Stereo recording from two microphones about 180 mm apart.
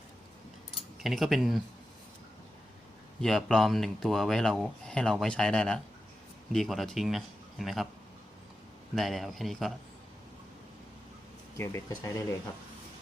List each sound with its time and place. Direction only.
1.0 s speech: centre (ahead or behind)
3.2 s speech: centre (ahead or behind)
9.0 s speech: centre (ahead or behind)
11.5 s speech: 15° left (ahead or behind)